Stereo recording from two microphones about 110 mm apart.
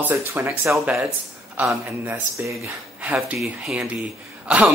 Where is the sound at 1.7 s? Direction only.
20° right (ahead or behind).